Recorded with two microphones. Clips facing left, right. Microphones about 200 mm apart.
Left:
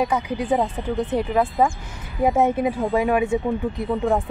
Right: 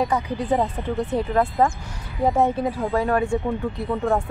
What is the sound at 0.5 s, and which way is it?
Speech, centre (ahead or behind).